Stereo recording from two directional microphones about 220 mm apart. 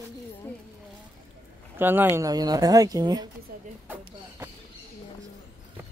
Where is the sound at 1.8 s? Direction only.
10° right (ahead or behind).